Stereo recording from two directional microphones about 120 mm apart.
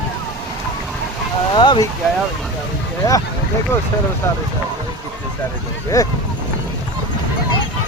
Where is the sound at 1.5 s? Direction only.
40° left (ahead or behind).